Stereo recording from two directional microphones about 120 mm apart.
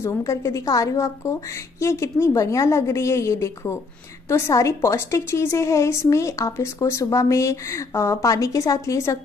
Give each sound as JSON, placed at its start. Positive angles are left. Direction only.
{"t": 0.0, "sound": "a woman's voice", "side_deg": 25}